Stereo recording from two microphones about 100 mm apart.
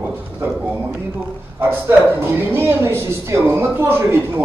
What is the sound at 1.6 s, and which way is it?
Speech, 25° right (ahead or behind).